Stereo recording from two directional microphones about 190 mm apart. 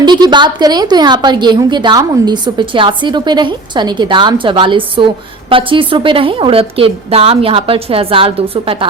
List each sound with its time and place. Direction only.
0.0 s a woman's voice: 25° right (ahead or behind)